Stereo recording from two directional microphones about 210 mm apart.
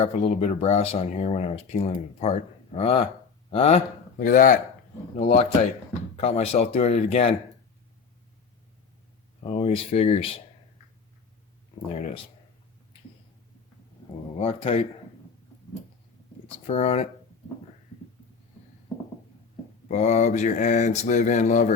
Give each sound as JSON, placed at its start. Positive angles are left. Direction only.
{"t": 0.0, "sound": "speech", "side_deg": 30}
{"t": 9.4, "sound": "speech", "side_deg": 30}
{"t": 11.9, "sound": "speech", "side_deg": 30}
{"t": 14.3, "sound": "speech", "side_deg": 25}
{"t": 16.6, "sound": "speech", "side_deg": 30}
{"t": 19.9, "sound": "speech", "side_deg": 35}